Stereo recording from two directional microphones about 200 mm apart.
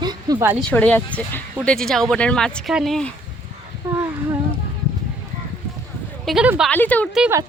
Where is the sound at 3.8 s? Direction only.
10° right (ahead or behind).